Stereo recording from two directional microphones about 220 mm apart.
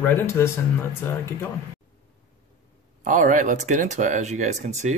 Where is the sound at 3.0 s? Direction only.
35° right (ahead or behind).